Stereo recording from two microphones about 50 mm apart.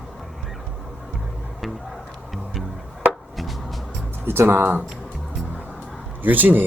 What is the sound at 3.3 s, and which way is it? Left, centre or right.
Chopping, centre.